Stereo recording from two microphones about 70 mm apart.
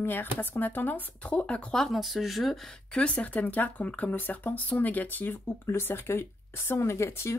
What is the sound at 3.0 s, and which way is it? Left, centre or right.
Speech, left.